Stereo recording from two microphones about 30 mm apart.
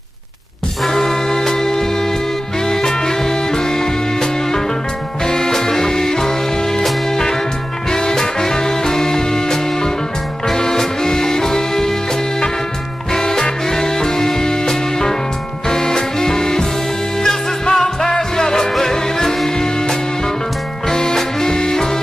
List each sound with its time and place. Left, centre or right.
0.8 s music: centre
13.1 s music: centre
20.9 s swing music: centre